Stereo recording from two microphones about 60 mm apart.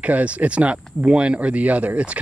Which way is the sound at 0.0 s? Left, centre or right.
Right.